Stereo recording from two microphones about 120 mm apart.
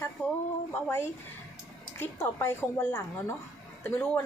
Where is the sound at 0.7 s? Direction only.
20° left (ahead or behind).